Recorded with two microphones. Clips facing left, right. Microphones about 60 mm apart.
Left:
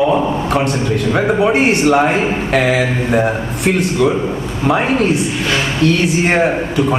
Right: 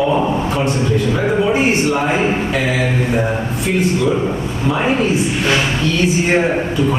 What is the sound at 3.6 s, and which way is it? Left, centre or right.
Speech, left.